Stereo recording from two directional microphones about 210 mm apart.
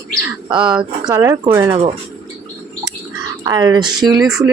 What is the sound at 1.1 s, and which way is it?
Speech, 15° right (ahead or behind).